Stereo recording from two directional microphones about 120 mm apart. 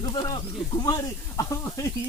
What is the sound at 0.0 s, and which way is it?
Speech, 35° left (ahead or behind).